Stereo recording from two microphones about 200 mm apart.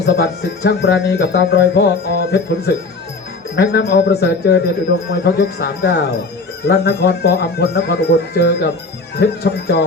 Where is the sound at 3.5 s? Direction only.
60° left (ahead or behind).